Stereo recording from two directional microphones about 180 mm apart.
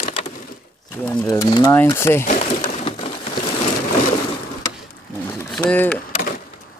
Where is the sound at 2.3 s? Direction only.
40° left (ahead or behind).